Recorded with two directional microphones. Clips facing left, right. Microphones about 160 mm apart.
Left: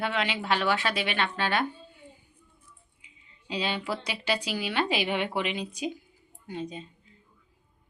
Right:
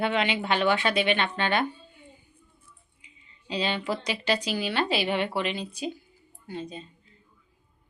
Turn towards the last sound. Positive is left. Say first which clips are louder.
# left 1 dB
turn(degrees=15)  # may be behind; listen again after turning